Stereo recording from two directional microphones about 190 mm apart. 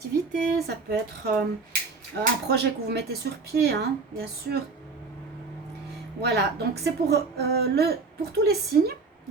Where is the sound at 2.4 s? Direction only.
60° right (ahead or behind).